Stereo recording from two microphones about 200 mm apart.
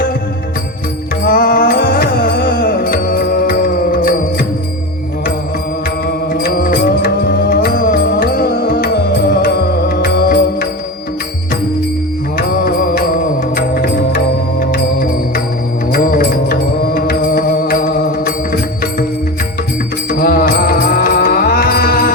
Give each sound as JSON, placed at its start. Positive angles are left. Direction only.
{"t": 1.2, "sound": "music", "side_deg": 45}
{"t": 6.1, "sound": "music", "side_deg": 50}
{"t": 12.4, "sound": "music", "side_deg": 45}
{"t": 15.9, "sound": "mantra", "side_deg": 45}
{"t": 20.1, "sound": "music", "side_deg": 45}